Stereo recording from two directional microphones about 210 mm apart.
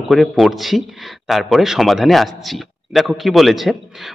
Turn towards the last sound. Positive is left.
turn(degrees=0)  # may be behind; listen again after turning